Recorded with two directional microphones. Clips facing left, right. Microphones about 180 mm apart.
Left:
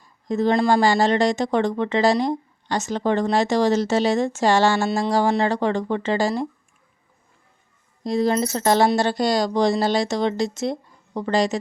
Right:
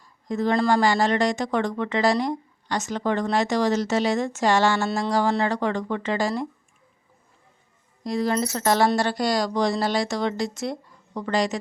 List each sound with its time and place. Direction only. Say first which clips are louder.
0.0 s a sound: left 4 dB; 25° left (ahead or behind)
0.7 s speech: left 3 dB; 30° left (ahead or behind)
8.0 s speech: left 3 dB; 25° left (ahead or behind)